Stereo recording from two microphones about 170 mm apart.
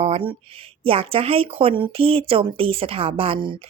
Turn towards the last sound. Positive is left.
turn(degrees=-30)  # may be behind; listen again after turning